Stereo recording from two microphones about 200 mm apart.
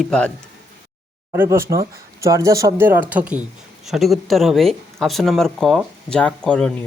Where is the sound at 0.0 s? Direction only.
5° left (ahead or behind).